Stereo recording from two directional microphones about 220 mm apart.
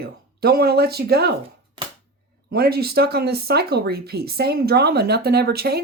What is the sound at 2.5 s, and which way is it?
Speech, 45° right (ahead or behind).